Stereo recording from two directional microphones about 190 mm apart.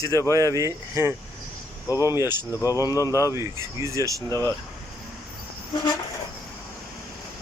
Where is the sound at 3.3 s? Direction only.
15° right (ahead or behind).